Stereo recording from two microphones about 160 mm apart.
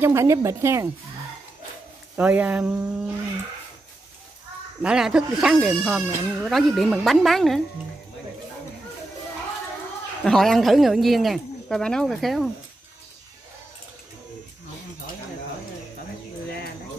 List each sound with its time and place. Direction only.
0.0 s speech: 20° right (ahead or behind)
2.1 s speech: 10° right (ahead or behind)
4.8 s speech: 5° right (ahead or behind)
10.2 s speech: 5° left (ahead or behind)